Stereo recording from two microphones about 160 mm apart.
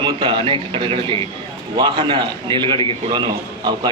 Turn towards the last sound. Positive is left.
turn(degrees=-30)  # may be behind; listen again after turning